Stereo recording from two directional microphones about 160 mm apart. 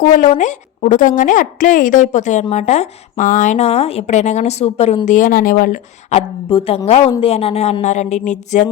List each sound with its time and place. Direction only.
0.0 s a woman's voice: 55° left (ahead or behind)
5.0 s a woman's voice: 55° left (ahead or behind)
6.1 s a woman's voice: 35° left (ahead or behind)